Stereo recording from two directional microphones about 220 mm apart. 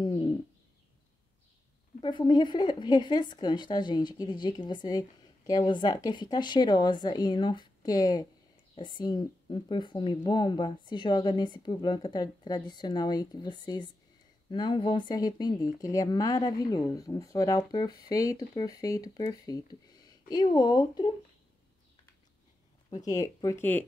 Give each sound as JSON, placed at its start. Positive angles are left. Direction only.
{"t": 0.0, "sound": "bird", "side_deg": 20}
{"t": 2.0, "sound": "speech", "side_deg": 20}
{"t": 22.8, "sound": "speech", "side_deg": 15}